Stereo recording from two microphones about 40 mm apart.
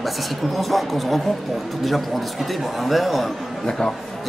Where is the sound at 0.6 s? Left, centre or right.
Centre.